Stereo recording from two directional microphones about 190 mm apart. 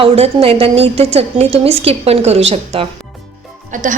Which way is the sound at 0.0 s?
30° right (ahead or behind).